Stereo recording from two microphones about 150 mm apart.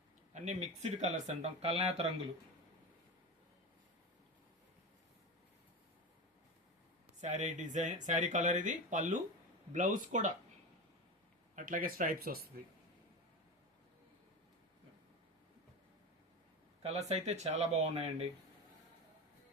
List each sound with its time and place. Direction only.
0.4 s speech: 50° right (ahead or behind)
7.2 s speech: 50° right (ahead or behind)
11.5 s speech: 65° right (ahead or behind)
16.8 s speech: 45° right (ahead or behind)